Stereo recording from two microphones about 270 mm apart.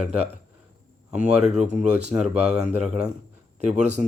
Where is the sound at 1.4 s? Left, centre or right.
Right.